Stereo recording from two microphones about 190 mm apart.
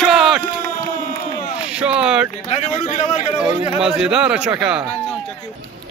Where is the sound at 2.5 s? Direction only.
35° left (ahead or behind).